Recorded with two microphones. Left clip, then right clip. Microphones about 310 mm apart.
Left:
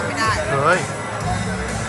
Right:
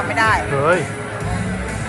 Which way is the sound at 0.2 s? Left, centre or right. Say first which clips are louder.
Right 3 dB; centre.